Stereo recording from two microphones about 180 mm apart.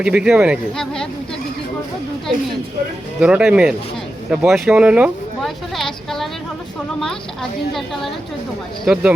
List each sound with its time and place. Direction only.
0.0 s speech: 5° right (ahead or behind)
3.2 s speech: 5° right (ahead or behind)
7.7 s speech: centre (ahead or behind)